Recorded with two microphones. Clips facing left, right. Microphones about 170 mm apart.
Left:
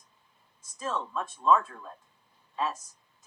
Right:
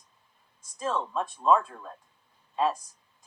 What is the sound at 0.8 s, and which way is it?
Speech, 30° right (ahead or behind).